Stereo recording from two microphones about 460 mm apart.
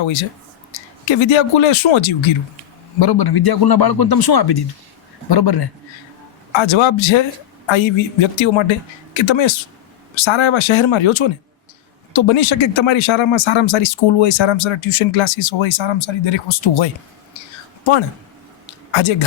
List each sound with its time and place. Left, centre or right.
0.0 s speech: left
3.0 s a man's voice: left
6.6 s speech: left
18.9 s speech: left